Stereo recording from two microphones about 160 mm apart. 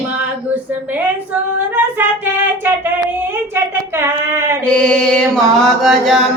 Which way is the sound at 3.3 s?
15° right (ahead or behind).